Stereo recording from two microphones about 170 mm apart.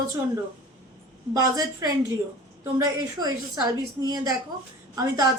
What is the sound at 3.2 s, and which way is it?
Speech, 25° right (ahead or behind).